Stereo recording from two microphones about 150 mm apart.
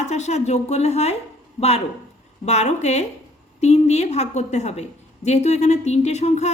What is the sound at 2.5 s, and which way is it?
A woman's voice, 50° left (ahead or behind).